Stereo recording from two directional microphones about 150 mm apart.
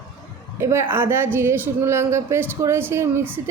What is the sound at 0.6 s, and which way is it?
A woman's voice, 15° right (ahead or behind).